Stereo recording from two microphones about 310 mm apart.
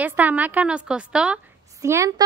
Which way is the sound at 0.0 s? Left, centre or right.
Centre.